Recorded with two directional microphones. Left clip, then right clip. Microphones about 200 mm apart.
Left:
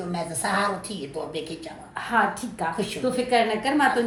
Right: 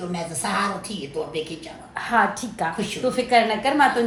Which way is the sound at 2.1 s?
15° right (ahead or behind).